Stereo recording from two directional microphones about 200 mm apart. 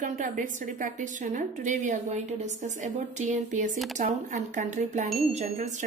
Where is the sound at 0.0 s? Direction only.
40° right (ahead or behind).